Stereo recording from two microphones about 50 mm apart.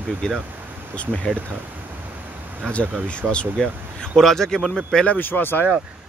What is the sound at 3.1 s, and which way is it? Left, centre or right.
Speech, left.